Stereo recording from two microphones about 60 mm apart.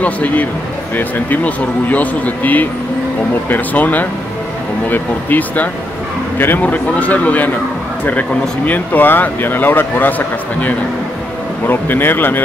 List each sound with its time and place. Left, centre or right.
0.0 s speech: left
6.6 s speech: left